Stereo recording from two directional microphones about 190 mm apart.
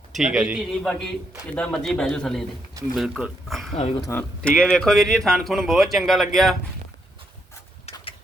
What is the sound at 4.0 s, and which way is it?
Speech, 10° left (ahead or behind).